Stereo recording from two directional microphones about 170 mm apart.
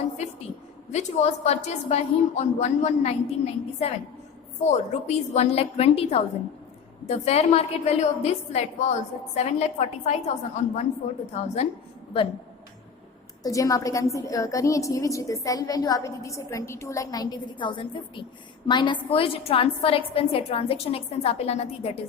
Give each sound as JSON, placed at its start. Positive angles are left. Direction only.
{"t": 0.9, "sound": "a woman's voice", "side_deg": 40}
{"t": 13.4, "sound": "a woman's voice", "side_deg": 20}